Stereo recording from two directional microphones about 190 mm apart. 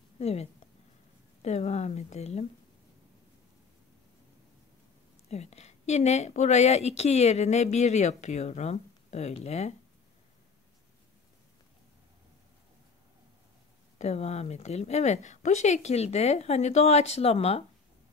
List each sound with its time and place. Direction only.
0.2 s a woman's voice: 35° left (ahead or behind)
5.3 s a woman's voice: 35° left (ahead or behind)
13.9 s a woman's voice: 35° left (ahead or behind)